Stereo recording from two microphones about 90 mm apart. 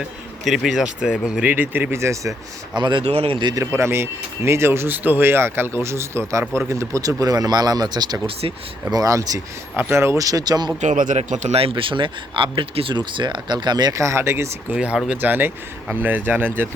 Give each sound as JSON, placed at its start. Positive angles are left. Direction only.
{"t": 0.4, "sound": "speech", "side_deg": -5}
{"t": 1.5, "sound": "speech", "side_deg": -20}
{"t": 2.7, "sound": "speech", "side_deg": -60}
{"t": 3.5, "sound": "speech", "side_deg": -30}
{"t": 9.7, "sound": "speech", "side_deg": -30}
{"t": 11.5, "sound": "speech", "side_deg": -80}
{"t": 13.0, "sound": "speech", "side_deg": -60}
{"t": 14.0, "sound": "speech", "side_deg": -30}
{"t": 14.7, "sound": "speech", "side_deg": -10}
{"t": 15.2, "sound": "speech", "side_deg": -20}